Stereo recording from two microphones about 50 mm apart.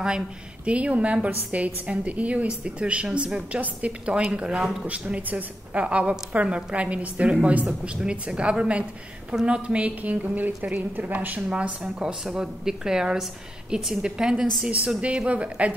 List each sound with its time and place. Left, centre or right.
0.7 s a woman's voice: right
4.8 s a woman's voice: right
11.4 s a woman's voice: right
15.0 s a woman's voice: right